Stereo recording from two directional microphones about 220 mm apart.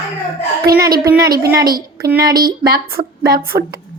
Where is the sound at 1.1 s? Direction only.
45° right (ahead or behind).